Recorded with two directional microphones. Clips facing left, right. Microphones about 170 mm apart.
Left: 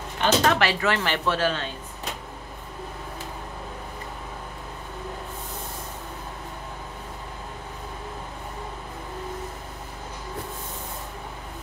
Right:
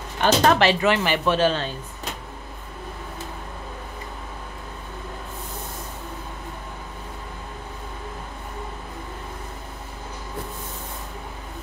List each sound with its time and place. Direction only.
0.2 s speech: 35° right (ahead or behind)
0.7 s speech: 20° right (ahead or behind)